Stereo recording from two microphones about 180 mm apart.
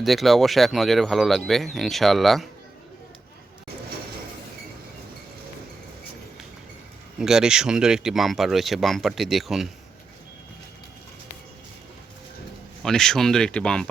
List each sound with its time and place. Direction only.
0.0 s speech: centre (ahead or behind)
7.2 s speech: 5° right (ahead or behind)
12.8 s speech: 5° left (ahead or behind)